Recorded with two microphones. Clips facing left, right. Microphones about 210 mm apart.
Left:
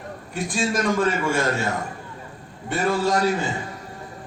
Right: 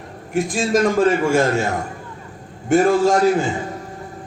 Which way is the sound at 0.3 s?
45° right (ahead or behind).